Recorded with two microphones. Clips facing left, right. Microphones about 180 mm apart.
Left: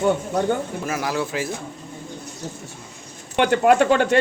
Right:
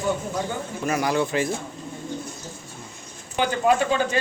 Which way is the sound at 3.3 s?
65° left (ahead or behind).